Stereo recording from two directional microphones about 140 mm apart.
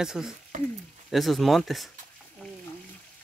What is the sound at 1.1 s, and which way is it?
Speech, centre (ahead or behind).